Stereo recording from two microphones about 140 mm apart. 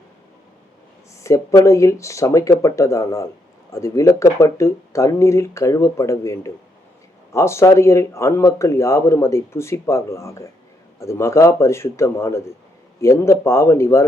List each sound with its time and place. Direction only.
1.2 s speech: 20° left (ahead or behind)